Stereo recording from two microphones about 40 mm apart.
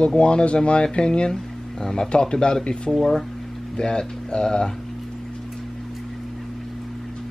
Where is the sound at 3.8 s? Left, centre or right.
Left.